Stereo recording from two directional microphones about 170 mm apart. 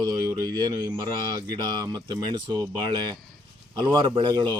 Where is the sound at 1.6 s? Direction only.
25° right (ahead or behind).